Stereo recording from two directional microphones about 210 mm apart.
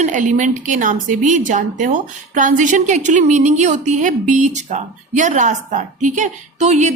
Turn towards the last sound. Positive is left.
turn(degrees=-35)  # may be behind; listen again after turning